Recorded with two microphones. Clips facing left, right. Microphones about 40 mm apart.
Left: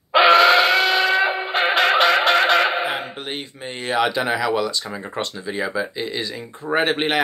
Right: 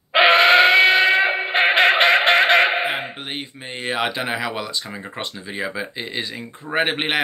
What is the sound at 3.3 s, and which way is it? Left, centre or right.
Speech, centre.